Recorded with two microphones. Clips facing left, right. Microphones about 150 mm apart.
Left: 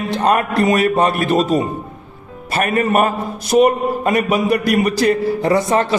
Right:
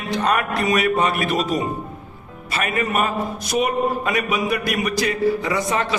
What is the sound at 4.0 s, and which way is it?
A man's voice, 35° left (ahead or behind).